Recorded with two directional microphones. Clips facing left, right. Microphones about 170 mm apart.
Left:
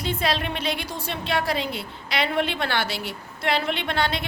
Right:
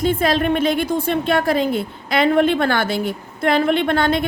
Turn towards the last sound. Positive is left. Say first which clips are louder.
# right 9 dB
turn(degrees=-50)  # may be behind; listen again after turning